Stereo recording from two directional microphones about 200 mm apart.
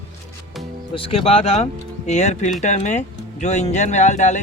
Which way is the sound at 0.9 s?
25° left (ahead or behind).